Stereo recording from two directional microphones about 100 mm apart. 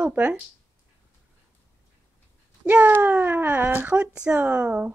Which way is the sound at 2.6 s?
20° right (ahead or behind).